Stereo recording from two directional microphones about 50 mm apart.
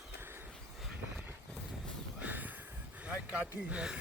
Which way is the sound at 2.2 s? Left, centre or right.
Right.